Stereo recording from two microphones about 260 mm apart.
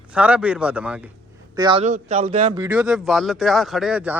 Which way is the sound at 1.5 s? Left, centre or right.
Centre.